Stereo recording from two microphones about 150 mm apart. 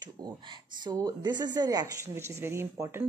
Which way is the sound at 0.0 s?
30° right (ahead or behind).